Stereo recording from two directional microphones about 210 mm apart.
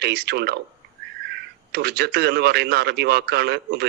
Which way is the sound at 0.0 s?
50° right (ahead or behind).